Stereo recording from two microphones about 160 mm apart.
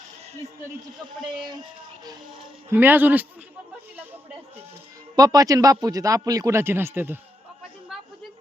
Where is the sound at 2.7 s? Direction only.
10° right (ahead or behind).